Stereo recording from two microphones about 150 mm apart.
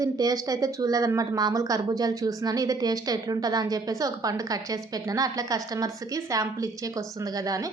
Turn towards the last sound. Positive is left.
turn(degrees=-25)  # may be behind; listen again after turning